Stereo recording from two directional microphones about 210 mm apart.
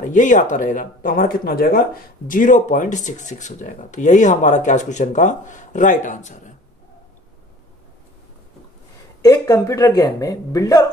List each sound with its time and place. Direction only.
0.0 s speech: 35° left (ahead or behind)
9.2 s speech: 15° left (ahead or behind)